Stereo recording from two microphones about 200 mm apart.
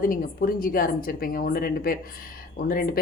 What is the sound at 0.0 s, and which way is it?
Speech, 45° left (ahead or behind).